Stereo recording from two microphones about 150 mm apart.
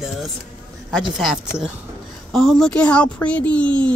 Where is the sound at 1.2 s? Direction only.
Centre (ahead or behind).